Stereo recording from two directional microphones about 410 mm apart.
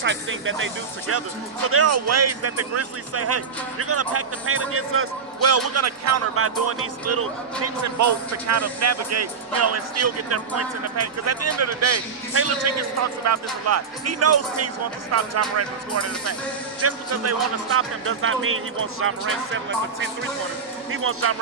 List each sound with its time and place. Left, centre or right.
0.0 s speech: right
16.8 s speech: right